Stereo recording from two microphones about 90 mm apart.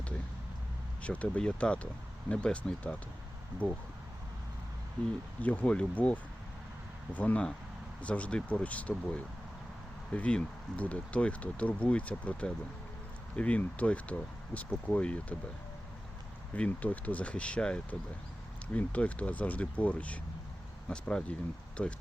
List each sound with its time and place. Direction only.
1.0 s speech: 15° left (ahead or behind)
5.4 s speech: 15° left (ahead or behind)
16.6 s speech: 15° left (ahead or behind)